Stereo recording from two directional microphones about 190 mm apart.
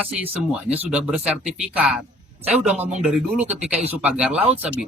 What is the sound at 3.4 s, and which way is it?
Speech, 35° right (ahead or behind).